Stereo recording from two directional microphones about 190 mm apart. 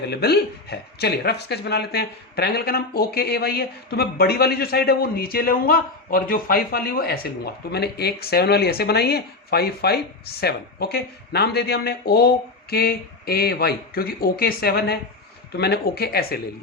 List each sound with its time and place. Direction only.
0.1 s speech: 55° left (ahead or behind)